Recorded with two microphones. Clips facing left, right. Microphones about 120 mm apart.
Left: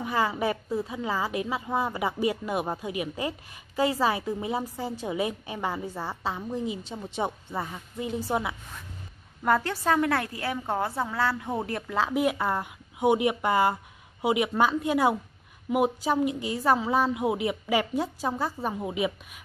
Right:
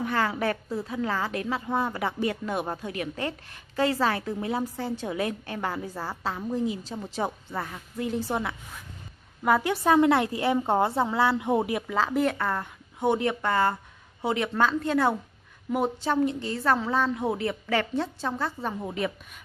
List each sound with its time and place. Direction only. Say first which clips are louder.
0.0 s a woman's voice: even; 5° left (ahead or behind)
9.4 s a woman's voice: right 2 dB; 10° right (ahead or behind)
11.9 s a woman's voice: left 1 dB; 5° left (ahead or behind)